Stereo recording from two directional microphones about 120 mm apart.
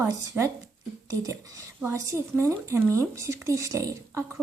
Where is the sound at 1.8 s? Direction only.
20° right (ahead or behind).